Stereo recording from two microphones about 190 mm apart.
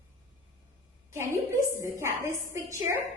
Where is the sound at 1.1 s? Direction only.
15° right (ahead or behind).